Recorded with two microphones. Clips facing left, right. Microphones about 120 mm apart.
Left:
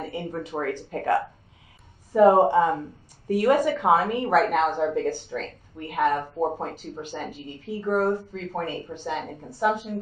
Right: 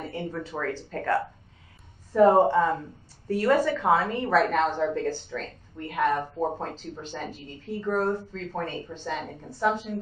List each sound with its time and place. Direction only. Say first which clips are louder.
0.0 s a woman's voice: left 2 dB; 10° left (ahead or behind)